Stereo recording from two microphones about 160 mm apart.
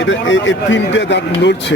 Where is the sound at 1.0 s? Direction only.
90° left.